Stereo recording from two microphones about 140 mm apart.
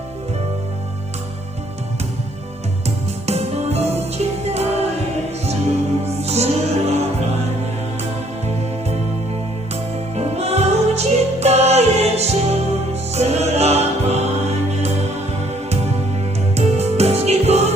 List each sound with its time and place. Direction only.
3.2 s music: 50° right (ahead or behind)
6.1 s music: 50° right (ahead or behind)
10.2 s music: 45° right (ahead or behind)
16.6 s music: 50° right (ahead or behind)